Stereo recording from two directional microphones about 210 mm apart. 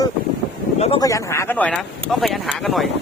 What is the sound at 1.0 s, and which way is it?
Speech, 15° left (ahead or behind).